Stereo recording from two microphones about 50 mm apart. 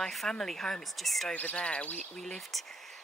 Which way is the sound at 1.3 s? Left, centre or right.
Left.